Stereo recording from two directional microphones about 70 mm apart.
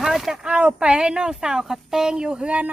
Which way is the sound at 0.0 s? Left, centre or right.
Centre.